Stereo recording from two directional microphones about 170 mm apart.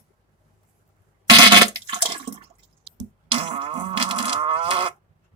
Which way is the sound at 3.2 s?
35° right (ahead or behind).